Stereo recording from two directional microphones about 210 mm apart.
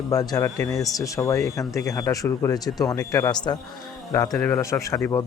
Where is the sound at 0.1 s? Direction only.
15° left (ahead or behind).